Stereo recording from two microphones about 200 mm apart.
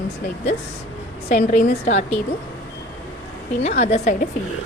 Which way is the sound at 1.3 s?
40° left (ahead or behind).